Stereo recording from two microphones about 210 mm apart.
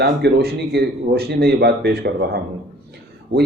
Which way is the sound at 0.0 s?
50° right (ahead or behind).